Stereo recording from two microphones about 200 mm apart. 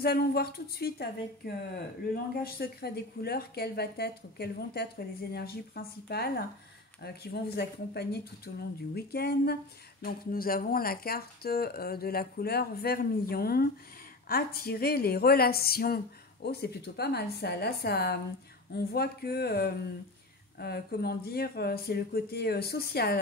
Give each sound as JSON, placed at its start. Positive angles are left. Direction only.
{"t": 0.0, "sound": "speech", "side_deg": 50}